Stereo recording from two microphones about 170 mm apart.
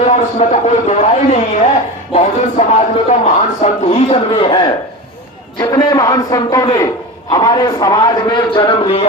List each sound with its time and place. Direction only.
0.3 s speech: 40° left (ahead or behind)
5.5 s a man's voice: 20° left (ahead or behind)